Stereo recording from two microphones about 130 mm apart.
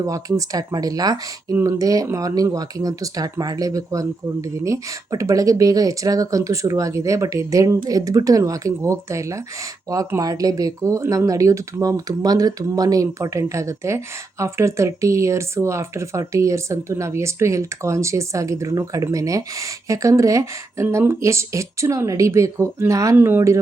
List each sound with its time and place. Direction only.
0.0 s speech: 25° right (ahead or behind)